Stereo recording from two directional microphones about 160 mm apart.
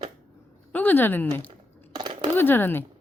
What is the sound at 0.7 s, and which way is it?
Speech, 10° left (ahead or behind).